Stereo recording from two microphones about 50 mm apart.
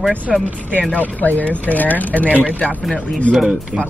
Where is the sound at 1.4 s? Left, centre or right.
Left.